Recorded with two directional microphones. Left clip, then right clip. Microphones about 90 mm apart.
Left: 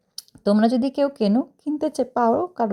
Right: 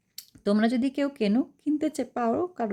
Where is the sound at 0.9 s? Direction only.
25° right (ahead or behind).